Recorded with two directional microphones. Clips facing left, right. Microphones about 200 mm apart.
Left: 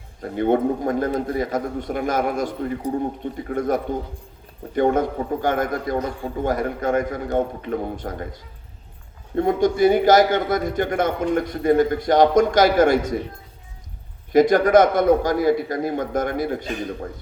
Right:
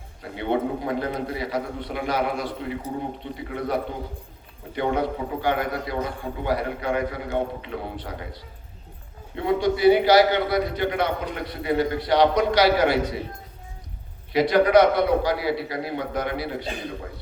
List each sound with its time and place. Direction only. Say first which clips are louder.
0.2 s a man's voice: left 6 dB; 45° left (ahead or behind)
14.3 s a man's voice: left 3 dB; 45° left (ahead or behind)